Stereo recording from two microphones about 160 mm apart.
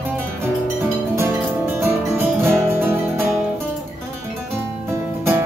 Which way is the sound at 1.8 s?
15° right (ahead or behind).